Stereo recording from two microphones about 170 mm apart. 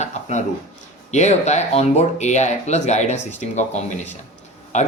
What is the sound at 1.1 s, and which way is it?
Speech, 40° left (ahead or behind).